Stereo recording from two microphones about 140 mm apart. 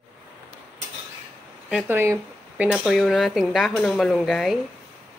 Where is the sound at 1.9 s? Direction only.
15° right (ahead or behind).